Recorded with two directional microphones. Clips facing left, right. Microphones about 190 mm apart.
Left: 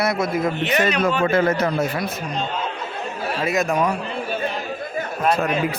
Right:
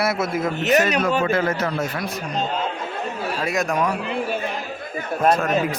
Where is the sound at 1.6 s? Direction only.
15° left (ahead or behind).